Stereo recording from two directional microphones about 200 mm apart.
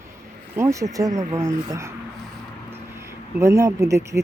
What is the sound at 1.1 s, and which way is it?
Speech, 35° right (ahead or behind).